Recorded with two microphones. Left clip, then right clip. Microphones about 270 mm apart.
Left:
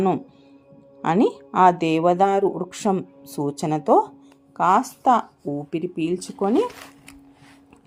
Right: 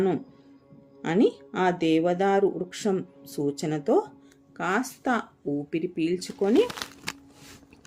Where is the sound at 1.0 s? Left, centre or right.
Centre.